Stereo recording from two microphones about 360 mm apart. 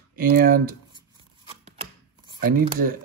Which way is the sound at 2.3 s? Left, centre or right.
Right.